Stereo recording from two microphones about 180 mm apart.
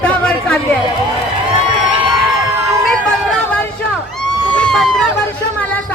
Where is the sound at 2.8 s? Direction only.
5° left (ahead or behind).